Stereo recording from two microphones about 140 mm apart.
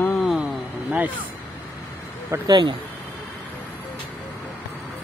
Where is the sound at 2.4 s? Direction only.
35° right (ahead or behind).